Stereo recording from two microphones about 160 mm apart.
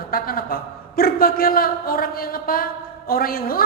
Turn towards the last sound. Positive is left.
turn(degrees=65)  # may be behind; listen again after turning